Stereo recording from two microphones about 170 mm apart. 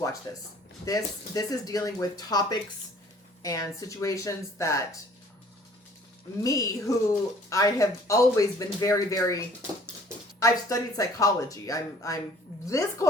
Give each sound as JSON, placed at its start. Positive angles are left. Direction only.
{"t": 0.3, "sound": "speech", "side_deg": 20}
{"t": 6.4, "sound": "speech", "side_deg": 20}
{"t": 10.4, "sound": "speech", "side_deg": 20}